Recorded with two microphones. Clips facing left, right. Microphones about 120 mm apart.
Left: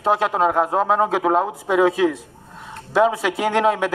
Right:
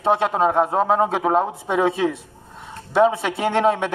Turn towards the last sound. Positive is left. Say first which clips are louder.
# even
turn(degrees=0)  # may be behind; listen again after turning